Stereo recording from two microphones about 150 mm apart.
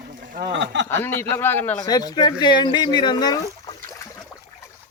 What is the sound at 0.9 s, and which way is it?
Speech, 15° left (ahead or behind).